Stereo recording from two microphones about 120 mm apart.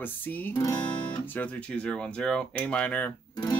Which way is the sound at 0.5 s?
35° left (ahead or behind).